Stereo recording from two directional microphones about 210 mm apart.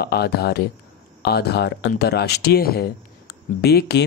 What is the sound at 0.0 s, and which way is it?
Speech, 50° left (ahead or behind).